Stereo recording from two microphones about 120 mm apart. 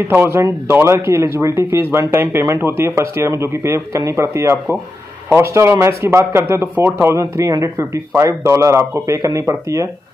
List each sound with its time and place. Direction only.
0.1 s speech: 20° right (ahead or behind)